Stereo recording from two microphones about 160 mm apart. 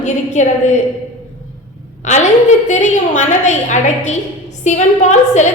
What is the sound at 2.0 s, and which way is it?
A woman's voice, 45° left (ahead or behind).